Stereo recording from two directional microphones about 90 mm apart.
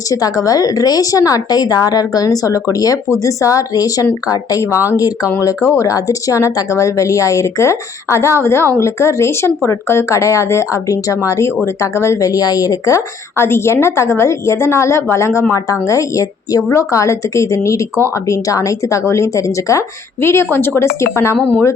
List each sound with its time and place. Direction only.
0.1 s a woman's voice: 40° left (ahead or behind)